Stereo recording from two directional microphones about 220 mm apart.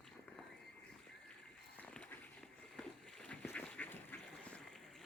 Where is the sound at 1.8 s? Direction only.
5° left (ahead or behind).